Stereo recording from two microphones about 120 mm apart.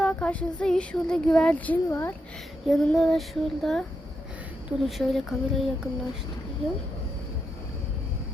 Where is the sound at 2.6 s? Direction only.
5° left (ahead or behind).